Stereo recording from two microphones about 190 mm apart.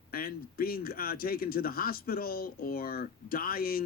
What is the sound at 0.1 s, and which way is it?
A man's voice, 50° left (ahead or behind).